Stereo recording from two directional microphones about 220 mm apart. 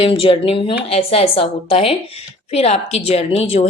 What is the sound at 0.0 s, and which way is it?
A woman's voice, 25° left (ahead or behind).